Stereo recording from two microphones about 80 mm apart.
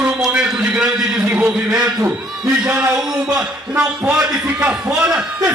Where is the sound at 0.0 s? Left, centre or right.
Centre.